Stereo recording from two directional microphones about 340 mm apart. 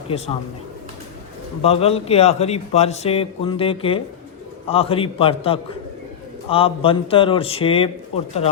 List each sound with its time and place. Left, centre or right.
1.6 s a man's voice: centre